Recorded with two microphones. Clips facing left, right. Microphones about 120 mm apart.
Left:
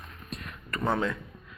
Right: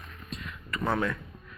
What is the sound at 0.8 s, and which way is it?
Speech, 20° left (ahead or behind).